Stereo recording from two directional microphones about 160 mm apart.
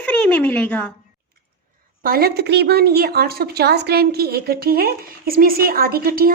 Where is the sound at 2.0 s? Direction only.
70° right (ahead or behind).